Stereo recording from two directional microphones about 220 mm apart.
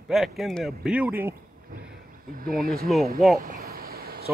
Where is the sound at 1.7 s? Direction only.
40° right (ahead or behind).